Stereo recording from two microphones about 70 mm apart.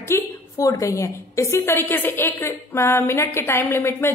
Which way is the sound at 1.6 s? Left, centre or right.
Left.